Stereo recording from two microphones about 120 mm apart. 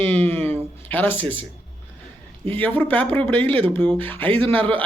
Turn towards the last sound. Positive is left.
turn(degrees=15)  # may be behind; listen again after turning